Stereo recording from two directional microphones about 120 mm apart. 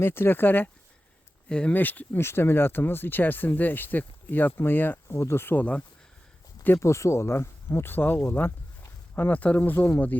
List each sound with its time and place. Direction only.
0.0 s speech: 20° left (ahead or behind)
6.7 s speech: 25° left (ahead or behind)